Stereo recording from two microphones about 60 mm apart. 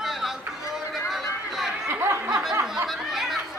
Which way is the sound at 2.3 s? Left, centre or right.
Centre.